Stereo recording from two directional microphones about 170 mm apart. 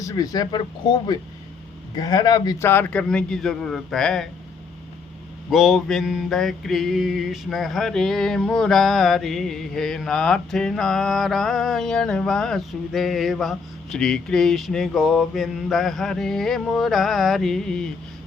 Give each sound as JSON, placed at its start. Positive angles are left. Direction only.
{"t": 0.0, "sound": "a man's voice", "side_deg": 20}
{"t": 5.5, "sound": "mantra", "side_deg": 0}